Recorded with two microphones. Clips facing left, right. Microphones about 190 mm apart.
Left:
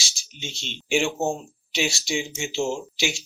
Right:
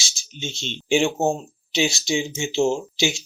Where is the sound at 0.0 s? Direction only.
25° right (ahead or behind).